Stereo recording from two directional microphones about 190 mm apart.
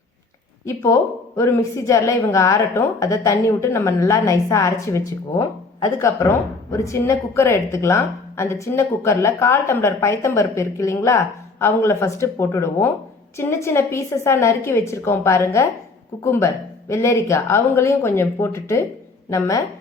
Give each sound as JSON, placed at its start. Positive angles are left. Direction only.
{"t": 0.6, "sound": "a woman's voice", "side_deg": 15}